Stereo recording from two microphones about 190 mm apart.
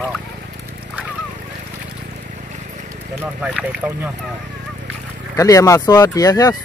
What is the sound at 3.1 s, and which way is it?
Speech, 10° right (ahead or behind).